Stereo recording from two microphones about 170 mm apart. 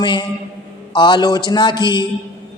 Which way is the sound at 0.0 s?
25° left (ahead or behind).